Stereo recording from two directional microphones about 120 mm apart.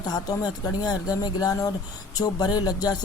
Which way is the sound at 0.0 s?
35° left (ahead or behind).